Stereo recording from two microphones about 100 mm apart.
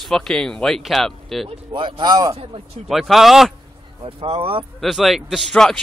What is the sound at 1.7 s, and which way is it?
Speech, 55° right (ahead or behind).